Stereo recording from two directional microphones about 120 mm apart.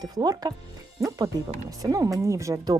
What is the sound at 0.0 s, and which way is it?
Speech, 35° right (ahead or behind).